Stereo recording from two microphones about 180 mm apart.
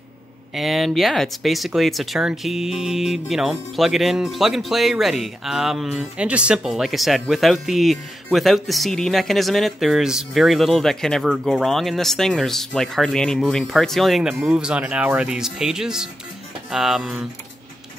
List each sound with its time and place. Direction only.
0.6 s speech: centre (ahead or behind)